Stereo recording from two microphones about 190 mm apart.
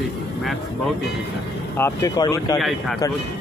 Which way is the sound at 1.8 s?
15° left (ahead or behind).